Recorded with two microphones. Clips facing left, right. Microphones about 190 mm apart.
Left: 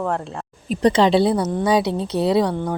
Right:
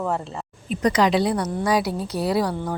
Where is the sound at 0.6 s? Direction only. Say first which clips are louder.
Left 4 dB; 30° left (ahead or behind).